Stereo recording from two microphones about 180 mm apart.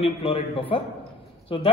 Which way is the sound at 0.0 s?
35° left (ahead or behind).